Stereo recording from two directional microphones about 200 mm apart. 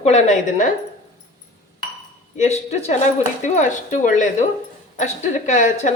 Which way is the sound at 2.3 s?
35° left (ahead or behind).